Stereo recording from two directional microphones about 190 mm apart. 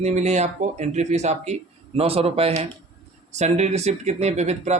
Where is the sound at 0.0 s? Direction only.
35° right (ahead or behind).